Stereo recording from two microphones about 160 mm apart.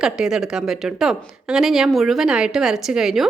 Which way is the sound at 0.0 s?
5° right (ahead or behind).